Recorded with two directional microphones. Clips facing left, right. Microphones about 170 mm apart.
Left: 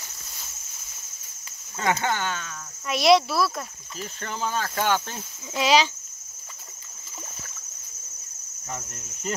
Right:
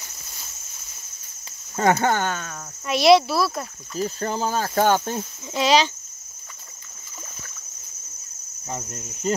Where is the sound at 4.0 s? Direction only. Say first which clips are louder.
Right 7 dB; 35° right (ahead or behind).